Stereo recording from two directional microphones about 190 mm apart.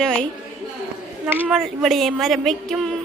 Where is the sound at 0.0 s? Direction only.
5° left (ahead or behind).